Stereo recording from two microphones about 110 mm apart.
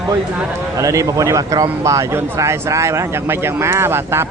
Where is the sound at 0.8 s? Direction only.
30° right (ahead or behind).